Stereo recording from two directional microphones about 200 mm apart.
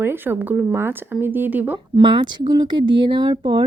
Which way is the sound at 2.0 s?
25° right (ahead or behind).